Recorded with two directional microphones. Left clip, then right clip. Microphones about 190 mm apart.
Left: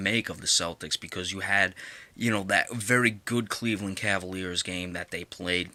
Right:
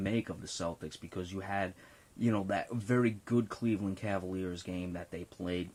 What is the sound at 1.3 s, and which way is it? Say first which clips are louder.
Speech: left 12 dB; 10° left (ahead or behind).